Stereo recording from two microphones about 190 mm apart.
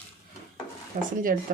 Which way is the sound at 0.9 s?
50° right (ahead or behind).